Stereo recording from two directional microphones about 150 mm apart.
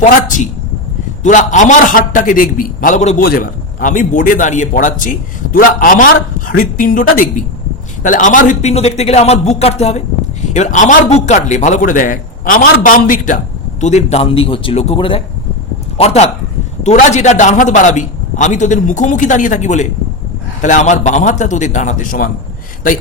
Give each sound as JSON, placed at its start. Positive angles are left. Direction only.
{"t": 0.0, "sound": "a man's voice", "side_deg": 60}
{"t": 3.2, "sound": "a man's voice", "side_deg": 80}
{"t": 8.7, "sound": "a man's voice", "side_deg": 45}
{"t": 13.8, "sound": "a man's voice", "side_deg": 50}